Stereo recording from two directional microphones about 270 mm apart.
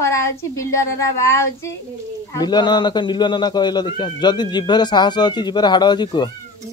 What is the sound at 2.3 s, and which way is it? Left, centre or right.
Speech, centre.